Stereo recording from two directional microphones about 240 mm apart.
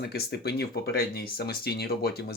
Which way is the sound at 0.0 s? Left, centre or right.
Left.